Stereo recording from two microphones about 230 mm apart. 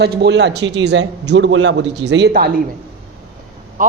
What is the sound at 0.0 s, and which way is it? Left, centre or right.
Speech, right.